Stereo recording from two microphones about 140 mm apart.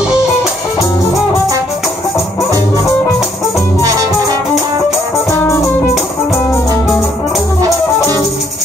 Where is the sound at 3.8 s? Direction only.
25° right (ahead or behind).